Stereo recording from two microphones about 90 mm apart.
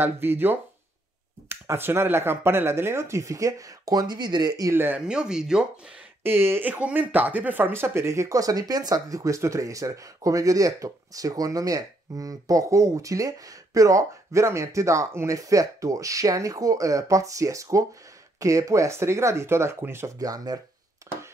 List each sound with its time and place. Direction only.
0.0 s speech: 25° right (ahead or behind); by 4.7 s 45° right (ahead or behind)
4.7 s speech: 25° right (ahead or behind)
5.0 s speech: 10° right (ahead or behind)
6.2 s speech: 25° right (ahead or behind)
20.2 s speech: 45° right (ahead or behind)